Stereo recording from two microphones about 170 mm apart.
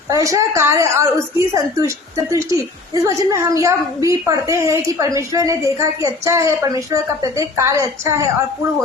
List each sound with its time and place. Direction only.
0.1 s a woman's voice: 20° right (ahead or behind)